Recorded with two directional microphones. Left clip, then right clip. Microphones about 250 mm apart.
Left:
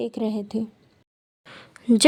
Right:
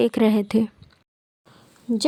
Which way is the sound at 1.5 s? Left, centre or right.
Left.